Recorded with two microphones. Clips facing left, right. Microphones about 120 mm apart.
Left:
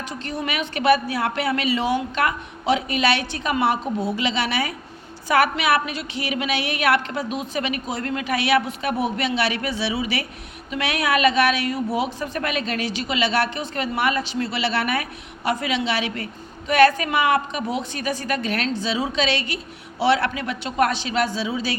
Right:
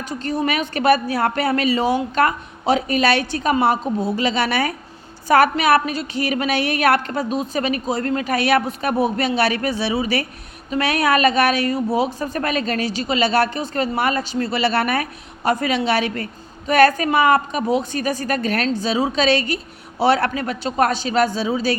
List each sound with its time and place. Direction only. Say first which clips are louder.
0.0 s a woman's voice: right 6 dB; 40° right (ahead or behind)